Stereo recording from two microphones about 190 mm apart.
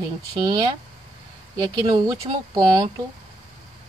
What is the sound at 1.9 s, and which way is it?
Speech, 25° right (ahead or behind).